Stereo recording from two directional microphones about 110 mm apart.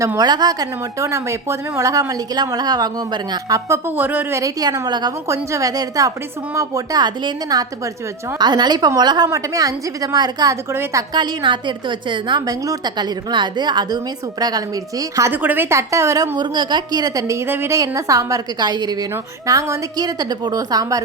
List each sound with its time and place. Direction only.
0.2 s a woman's voice: 40° right (ahead or behind)
3.7 s speech: 20° right (ahead or behind)
4.4 s a woman's voice: 30° right (ahead or behind)
11.1 s a woman's voice: 40° right (ahead or behind)
15.3 s a woman's voice: 15° right (ahead or behind)
16.4 s a woman's voice: 40° right (ahead or behind)